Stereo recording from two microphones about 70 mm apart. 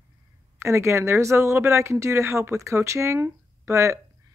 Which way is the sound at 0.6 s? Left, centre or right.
Right.